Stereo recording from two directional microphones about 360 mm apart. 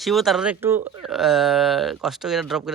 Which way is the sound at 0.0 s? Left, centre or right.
Centre.